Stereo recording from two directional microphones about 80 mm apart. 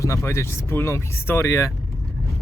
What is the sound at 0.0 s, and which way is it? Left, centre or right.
Speech, left.